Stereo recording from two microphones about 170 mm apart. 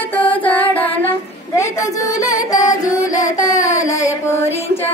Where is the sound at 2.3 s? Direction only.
20° left (ahead or behind).